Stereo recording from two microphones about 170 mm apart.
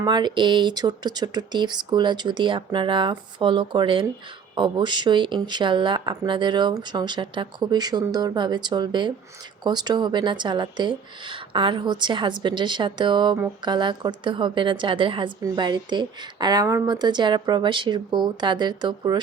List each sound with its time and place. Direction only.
0.0 s speech: 25° right (ahead or behind)